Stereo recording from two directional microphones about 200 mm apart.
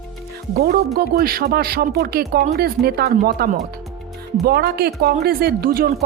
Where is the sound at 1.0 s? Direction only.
50° right (ahead or behind).